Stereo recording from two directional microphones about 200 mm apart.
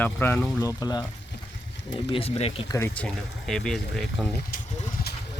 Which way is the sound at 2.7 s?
10° left (ahead or behind).